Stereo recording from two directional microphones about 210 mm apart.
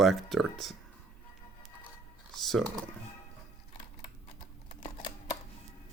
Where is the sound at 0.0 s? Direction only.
Centre (ahead or behind).